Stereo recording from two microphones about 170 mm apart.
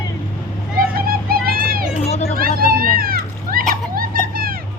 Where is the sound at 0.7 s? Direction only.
60° right (ahead or behind).